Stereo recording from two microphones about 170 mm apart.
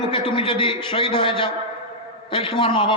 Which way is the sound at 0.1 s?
30° left (ahead or behind).